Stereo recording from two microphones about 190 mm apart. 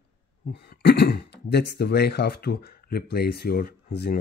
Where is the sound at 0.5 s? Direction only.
60° left (ahead or behind).